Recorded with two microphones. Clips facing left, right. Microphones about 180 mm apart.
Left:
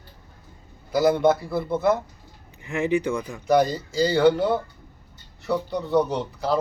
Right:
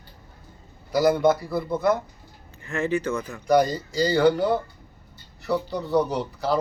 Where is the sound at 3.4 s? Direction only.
Centre (ahead or behind).